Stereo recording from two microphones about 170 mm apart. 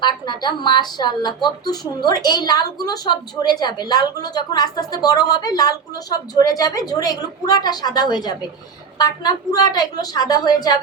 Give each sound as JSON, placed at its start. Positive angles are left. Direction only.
{"t": 0.0, "sound": "a woman's voice", "side_deg": 25}